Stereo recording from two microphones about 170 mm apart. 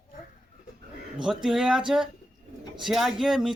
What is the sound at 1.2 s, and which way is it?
Speech, 5° right (ahead or behind).